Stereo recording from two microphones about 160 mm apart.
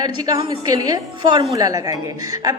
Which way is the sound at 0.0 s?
25° right (ahead or behind).